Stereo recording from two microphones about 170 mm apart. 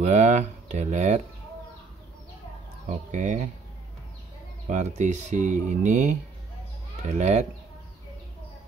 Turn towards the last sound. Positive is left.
turn(degrees=-45)  # may be behind; listen again after turning